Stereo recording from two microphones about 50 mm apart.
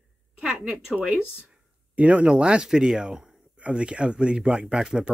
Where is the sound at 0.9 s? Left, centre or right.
Right.